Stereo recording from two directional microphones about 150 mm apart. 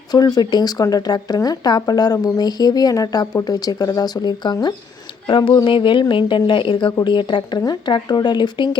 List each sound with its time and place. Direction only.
0.1 s a woman's voice: 25° left (ahead or behind)